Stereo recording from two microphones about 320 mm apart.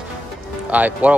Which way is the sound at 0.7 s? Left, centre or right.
Centre.